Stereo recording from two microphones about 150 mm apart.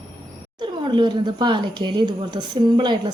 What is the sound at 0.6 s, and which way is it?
Speech, 30° right (ahead or behind).